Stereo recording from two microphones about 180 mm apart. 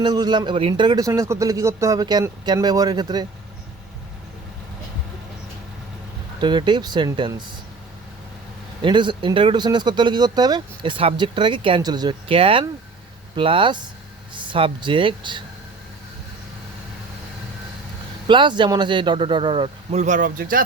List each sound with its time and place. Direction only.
0.0 s speech: 25° right (ahead or behind)
6.4 s speech: 25° right (ahead or behind)
8.8 s speech: 25° right (ahead or behind)
18.3 s speech: 25° right (ahead or behind); by 20.7 s 50° right (ahead or behind)